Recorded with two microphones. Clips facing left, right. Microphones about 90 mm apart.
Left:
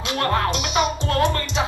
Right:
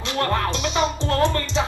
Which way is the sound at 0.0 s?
20° left (ahead or behind).